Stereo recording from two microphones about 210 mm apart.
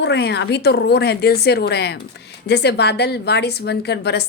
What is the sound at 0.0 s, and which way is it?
A woman's voice, 55° left (ahead or behind).